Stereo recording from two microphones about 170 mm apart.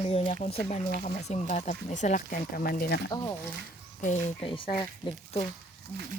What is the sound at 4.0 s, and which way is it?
Speech, 45° left (ahead or behind).